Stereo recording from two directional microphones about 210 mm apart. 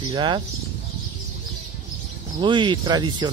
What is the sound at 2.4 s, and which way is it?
Speech, 20° right (ahead or behind).